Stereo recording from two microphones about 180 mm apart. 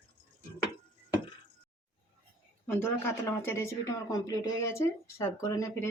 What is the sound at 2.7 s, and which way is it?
Speech, 10° left (ahead or behind).